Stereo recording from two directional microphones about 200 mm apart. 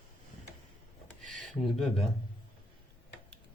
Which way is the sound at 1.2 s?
40° right (ahead or behind).